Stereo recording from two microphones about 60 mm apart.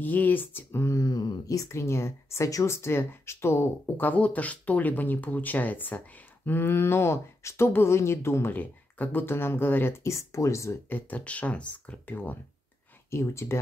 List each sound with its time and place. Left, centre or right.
0.0 s speech: left
0.9 s speech: left
1.7 s speech: left
8.5 s speech: left
10.9 s speech: left
13.1 s speech: left